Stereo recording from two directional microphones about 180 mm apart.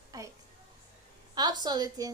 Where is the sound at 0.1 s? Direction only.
20° right (ahead or behind).